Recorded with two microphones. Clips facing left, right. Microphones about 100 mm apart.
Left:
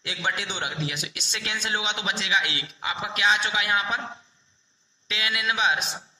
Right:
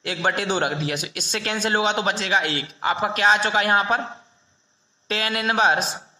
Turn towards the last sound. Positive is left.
turn(degrees=-40)  # may be behind; listen again after turning